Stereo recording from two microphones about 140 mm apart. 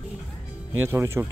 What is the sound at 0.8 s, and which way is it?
Speech, 20° right (ahead or behind).